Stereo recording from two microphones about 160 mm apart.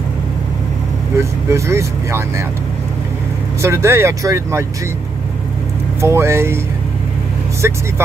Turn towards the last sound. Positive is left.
turn(degrees=-15)  # may be behind; listen again after turning